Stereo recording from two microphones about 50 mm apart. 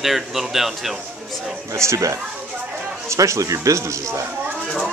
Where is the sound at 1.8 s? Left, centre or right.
Right.